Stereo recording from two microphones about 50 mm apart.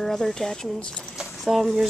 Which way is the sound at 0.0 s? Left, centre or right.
Centre.